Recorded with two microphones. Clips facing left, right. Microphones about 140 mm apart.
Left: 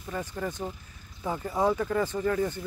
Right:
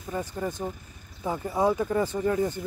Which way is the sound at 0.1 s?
15° right (ahead or behind).